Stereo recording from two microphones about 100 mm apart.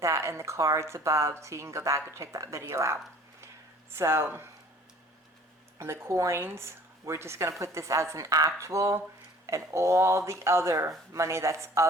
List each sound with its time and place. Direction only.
0.0 s speech: 30° right (ahead or behind)
5.8 s speech: 25° right (ahead or behind)